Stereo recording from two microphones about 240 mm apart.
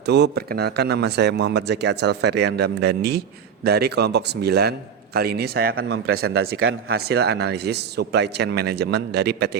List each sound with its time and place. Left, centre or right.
0.0 s speech: right